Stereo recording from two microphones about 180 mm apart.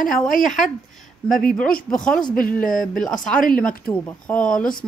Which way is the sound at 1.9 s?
5° left (ahead or behind).